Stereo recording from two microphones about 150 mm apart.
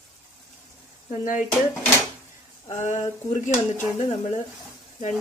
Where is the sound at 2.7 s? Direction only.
55° left (ahead or behind).